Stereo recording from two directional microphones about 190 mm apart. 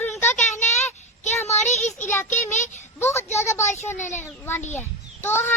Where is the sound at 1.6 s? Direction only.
35° left (ahead or behind).